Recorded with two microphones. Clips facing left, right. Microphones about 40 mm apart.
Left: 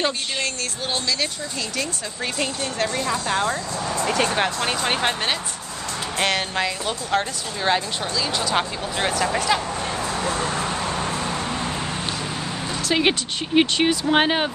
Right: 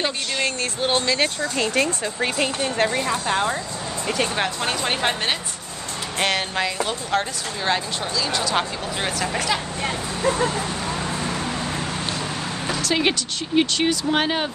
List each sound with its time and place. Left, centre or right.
0.4 s speech: right
2.1 s speech: centre
4.1 s speech: centre
6.1 s speech: centre
12.8 s a woman's voice: centre